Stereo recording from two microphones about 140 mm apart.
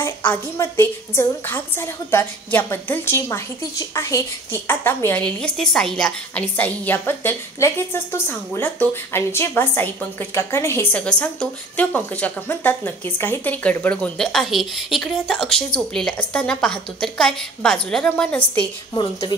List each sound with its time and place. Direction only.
0.0 s a woman's voice: 15° left (ahead or behind)